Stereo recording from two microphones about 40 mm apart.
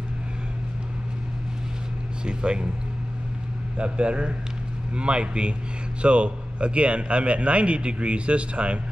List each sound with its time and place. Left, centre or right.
2.2 s a man's voice: right
3.7 s a man's voice: right